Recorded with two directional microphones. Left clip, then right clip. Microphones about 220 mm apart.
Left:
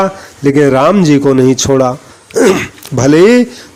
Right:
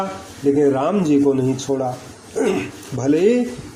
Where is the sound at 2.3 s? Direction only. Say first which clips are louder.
Left 11 dB; 40° left (ahead or behind).